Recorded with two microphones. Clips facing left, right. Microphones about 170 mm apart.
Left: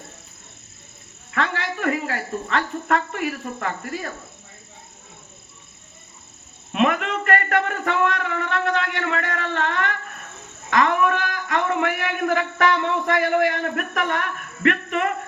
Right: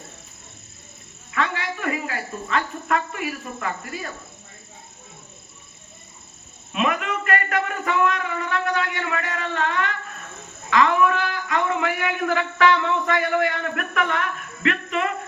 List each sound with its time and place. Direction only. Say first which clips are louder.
1.3 s speech: left 1 dB; 60° left (ahead or behind)
6.7 s a man's voice: left 3 dB; 60° left (ahead or behind)
10.7 s a sound: right 1 dB; 50° left (ahead or behind)
13.5 s speech: left 2 dB; 40° left (ahead or behind)